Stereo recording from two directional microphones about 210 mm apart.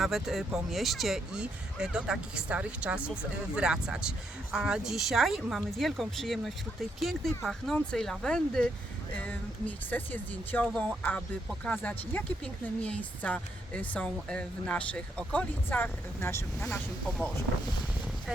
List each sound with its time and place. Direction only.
0.0 s a woman's voice: centre (ahead or behind)